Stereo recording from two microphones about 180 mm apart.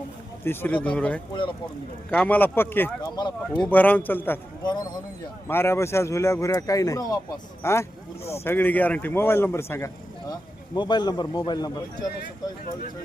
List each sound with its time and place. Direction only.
0.4 s a man's voice: 10° left (ahead or behind)
3.2 s a man's voice: 25° left (ahead or behind)
3.6 s a man's voice: 10° left (ahead or behind)
5.5 s a man's voice: 15° left (ahead or behind)